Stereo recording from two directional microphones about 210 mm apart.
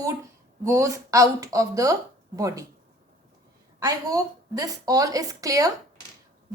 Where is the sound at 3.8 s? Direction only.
15° right (ahead or behind).